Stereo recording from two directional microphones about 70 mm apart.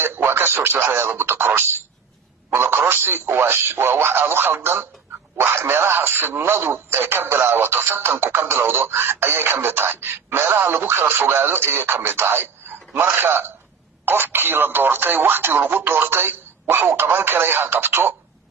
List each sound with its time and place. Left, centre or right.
0.0 s speech: right